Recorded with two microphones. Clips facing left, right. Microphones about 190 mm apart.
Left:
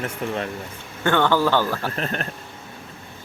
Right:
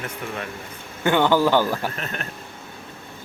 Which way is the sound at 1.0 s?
15° right (ahead or behind).